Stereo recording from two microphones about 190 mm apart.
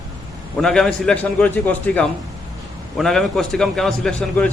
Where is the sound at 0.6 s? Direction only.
Centre (ahead or behind).